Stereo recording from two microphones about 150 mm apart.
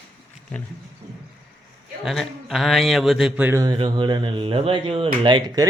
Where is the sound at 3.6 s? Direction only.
30° right (ahead or behind).